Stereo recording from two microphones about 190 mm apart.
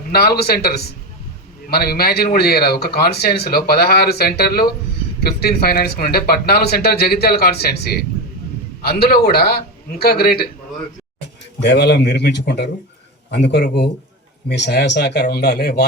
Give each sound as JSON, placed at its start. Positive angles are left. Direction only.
{"t": 0.1, "sound": "a man's voice", "side_deg": 55}
{"t": 11.6, "sound": "a man's voice", "side_deg": 60}